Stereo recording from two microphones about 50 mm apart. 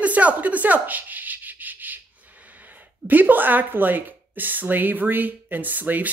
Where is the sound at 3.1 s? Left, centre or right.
Right.